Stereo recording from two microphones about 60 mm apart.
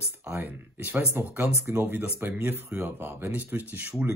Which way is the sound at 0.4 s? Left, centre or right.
Right.